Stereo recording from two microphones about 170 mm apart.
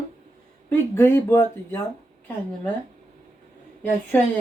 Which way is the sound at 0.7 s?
10° left (ahead or behind).